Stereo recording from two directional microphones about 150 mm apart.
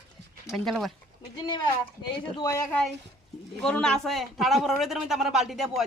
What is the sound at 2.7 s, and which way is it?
A woman's voice, 10° left (ahead or behind).